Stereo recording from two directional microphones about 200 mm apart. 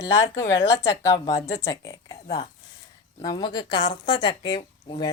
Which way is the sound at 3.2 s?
20° left (ahead or behind).